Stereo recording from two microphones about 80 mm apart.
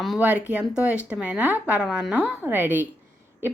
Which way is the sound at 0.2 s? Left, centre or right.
Centre.